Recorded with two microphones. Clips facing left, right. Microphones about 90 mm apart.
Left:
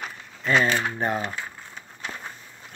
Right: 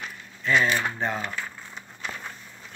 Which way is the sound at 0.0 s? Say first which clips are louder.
Left 1 dB; 40° left (ahead or behind).